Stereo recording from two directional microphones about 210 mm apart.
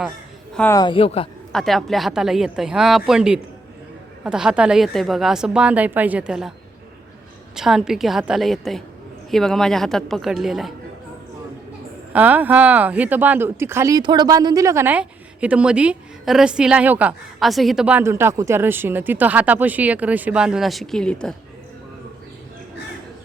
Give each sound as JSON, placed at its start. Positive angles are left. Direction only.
{"t": 0.5, "sound": "speech", "side_deg": 10}
{"t": 0.8, "sound": "speech", "side_deg": 25}
{"t": 1.5, "sound": "a woman's voice", "side_deg": 0}
{"t": 7.5, "sound": "a woman's voice", "side_deg": 0}
{"t": 12.1, "sound": "speech", "side_deg": -5}